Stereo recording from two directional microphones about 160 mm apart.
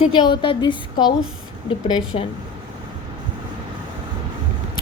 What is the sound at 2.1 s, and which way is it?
Speech, 40° left (ahead or behind).